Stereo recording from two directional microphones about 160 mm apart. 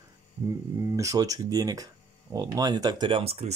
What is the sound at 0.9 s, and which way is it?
Speech, 20° right (ahead or behind).